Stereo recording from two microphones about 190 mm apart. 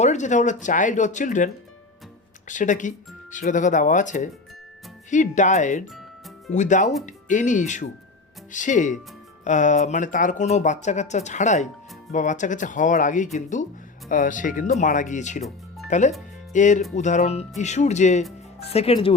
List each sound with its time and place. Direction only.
0.0 s speech: 40° left (ahead or behind)
2.5 s speech: 40° left (ahead or behind)